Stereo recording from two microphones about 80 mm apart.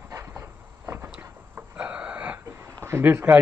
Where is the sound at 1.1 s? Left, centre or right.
Centre.